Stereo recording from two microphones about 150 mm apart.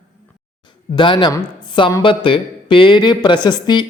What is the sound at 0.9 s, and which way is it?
Speech, 30° left (ahead or behind).